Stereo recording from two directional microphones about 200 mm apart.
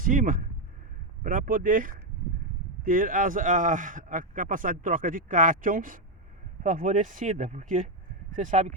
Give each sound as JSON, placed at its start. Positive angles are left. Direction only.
{"t": 0.0, "sound": "speech", "side_deg": -40}